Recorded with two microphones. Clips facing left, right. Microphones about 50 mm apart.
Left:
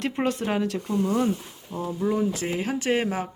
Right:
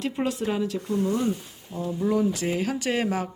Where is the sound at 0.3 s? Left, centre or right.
Left.